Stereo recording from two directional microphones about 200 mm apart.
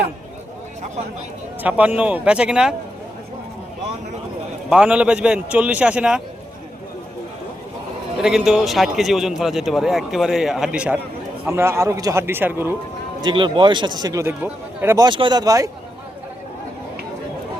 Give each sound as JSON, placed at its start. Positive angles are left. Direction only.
{"t": 1.6, "sound": "a man's voice", "side_deg": -5}
{"t": 4.7, "sound": "a man's voice", "side_deg": -5}
{"t": 8.2, "sound": "a man's voice", "side_deg": 0}
{"t": 13.2, "sound": "a man's voice", "side_deg": -25}